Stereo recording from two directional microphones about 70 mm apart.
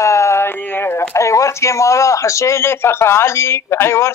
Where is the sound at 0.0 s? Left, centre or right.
Left.